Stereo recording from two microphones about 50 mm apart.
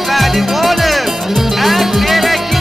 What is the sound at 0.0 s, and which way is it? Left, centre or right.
Music, centre.